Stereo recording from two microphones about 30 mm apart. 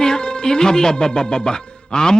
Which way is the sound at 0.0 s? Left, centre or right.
Left.